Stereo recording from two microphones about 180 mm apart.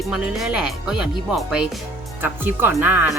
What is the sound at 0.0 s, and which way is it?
Speech, centre (ahead or behind).